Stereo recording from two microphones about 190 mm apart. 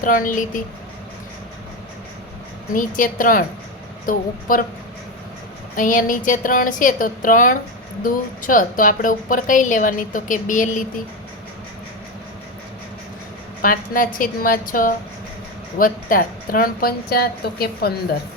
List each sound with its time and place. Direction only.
0.0 s a woman's voice: 45° left (ahead or behind)
2.7 s a woman's voice: 45° left (ahead or behind)
5.7 s a woman's voice: 45° left (ahead or behind)
13.6 s a woman's voice: 45° left (ahead or behind)